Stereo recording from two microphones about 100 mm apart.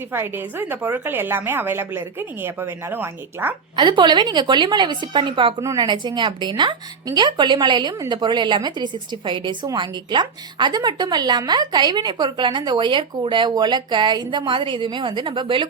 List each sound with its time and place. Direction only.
0.1 s a woman's voice: 20° right (ahead or behind)
3.8 s a woman's voice: 50° right (ahead or behind)